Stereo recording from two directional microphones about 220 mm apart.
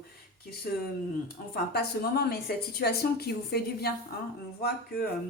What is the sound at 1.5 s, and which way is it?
A woman's voice, 45° left (ahead or behind).